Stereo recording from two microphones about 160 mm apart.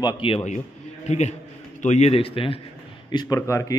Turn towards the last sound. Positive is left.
turn(degrees=20)  # may be behind; listen again after turning